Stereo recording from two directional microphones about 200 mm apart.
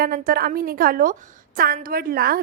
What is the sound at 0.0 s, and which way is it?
A woman's voice, 45° right (ahead or behind).